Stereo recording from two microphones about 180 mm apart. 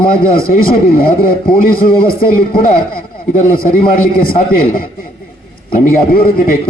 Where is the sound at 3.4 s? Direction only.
55° left (ahead or behind).